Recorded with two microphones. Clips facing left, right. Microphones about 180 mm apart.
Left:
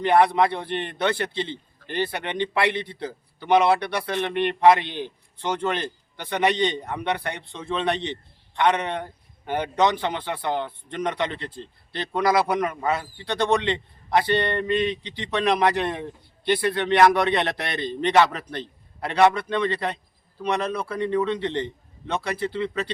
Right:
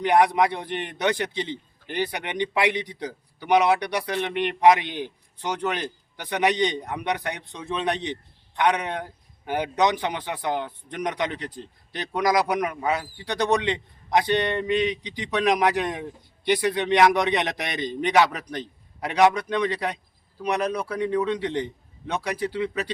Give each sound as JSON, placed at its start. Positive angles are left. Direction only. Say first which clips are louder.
{"t": 0.0, "sound": "speech", "louder": "left 1 dB", "side_deg": -15}